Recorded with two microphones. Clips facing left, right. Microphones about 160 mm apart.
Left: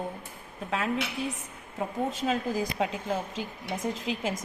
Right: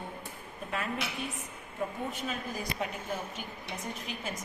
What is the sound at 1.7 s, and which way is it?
A woman's voice, 90° left.